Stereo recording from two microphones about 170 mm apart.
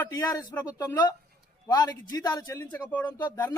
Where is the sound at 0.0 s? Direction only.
20° left (ahead or behind).